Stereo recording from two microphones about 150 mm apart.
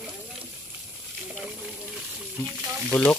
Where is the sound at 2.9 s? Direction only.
10° left (ahead or behind).